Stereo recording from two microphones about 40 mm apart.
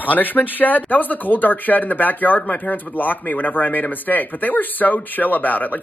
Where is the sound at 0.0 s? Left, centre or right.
Left.